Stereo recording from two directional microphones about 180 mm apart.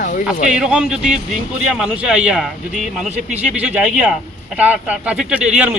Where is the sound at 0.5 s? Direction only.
5° right (ahead or behind).